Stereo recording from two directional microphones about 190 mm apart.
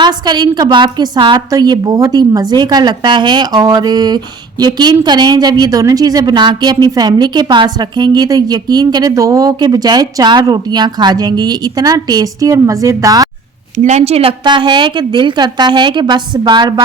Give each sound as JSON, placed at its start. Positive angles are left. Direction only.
{"t": 0.0, "sound": "a woman's voice", "side_deg": -25}
{"t": 13.7, "sound": "a woman's voice", "side_deg": -35}